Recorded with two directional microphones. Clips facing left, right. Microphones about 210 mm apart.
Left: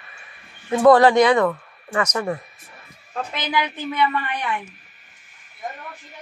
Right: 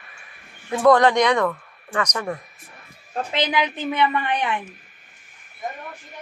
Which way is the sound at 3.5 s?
20° right (ahead or behind).